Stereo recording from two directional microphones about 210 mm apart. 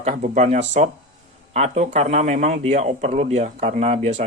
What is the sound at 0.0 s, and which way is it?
Speech, 35° right (ahead or behind).